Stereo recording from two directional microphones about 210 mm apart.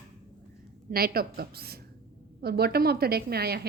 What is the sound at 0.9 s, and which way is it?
A woman's voice, 45° right (ahead or behind).